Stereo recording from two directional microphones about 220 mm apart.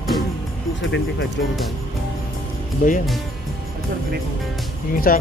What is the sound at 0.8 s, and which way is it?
Speech, 60° left (ahead or behind).